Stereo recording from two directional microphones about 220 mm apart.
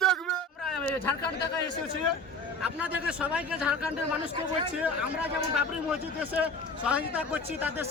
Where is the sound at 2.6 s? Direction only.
5° right (ahead or behind).